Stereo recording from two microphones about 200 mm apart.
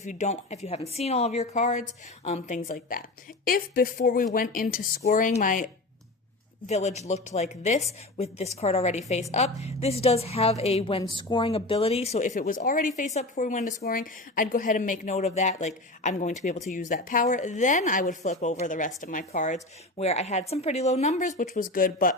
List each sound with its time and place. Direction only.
0.0 s a woman's voice: 35° left (ahead or behind)